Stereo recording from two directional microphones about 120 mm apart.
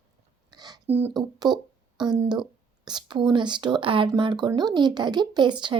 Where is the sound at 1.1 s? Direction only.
35° right (ahead or behind).